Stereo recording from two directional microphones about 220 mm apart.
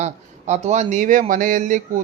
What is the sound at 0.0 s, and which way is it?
Speech, 30° right (ahead or behind).